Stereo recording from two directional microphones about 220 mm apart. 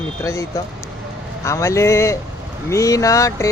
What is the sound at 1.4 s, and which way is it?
Speech, 15° left (ahead or behind).